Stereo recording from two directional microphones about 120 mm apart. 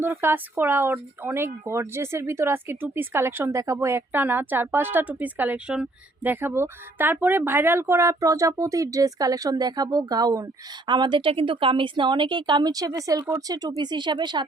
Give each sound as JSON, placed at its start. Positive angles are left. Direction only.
{"t": 0.0, "sound": "speech", "side_deg": -20}